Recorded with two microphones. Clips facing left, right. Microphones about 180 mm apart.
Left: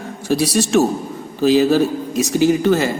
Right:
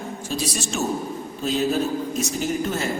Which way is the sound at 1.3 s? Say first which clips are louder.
Left 10 dB; 80° left.